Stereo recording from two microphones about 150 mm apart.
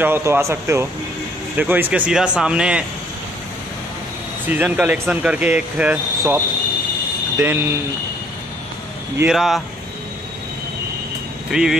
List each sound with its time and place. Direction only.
0.0 s speech: 15° right (ahead or behind)
4.5 s speech: 10° right (ahead or behind)
9.3 s speech: centre (ahead or behind)
11.5 s speech: 5° right (ahead or behind)